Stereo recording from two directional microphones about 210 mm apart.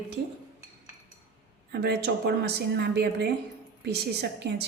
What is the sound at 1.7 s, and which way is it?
A woman's voice, 50° right (ahead or behind).